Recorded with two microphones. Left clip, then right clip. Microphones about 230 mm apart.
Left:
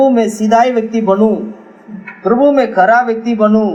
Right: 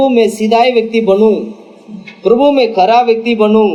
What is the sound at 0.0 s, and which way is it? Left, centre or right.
Speech, left.